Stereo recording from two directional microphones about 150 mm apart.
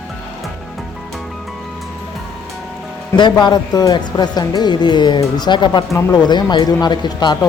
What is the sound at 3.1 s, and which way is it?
Speech, 30° left (ahead or behind).